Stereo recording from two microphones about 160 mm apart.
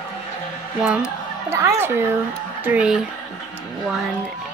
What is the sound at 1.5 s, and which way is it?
A woman's voice, 15° right (ahead or behind).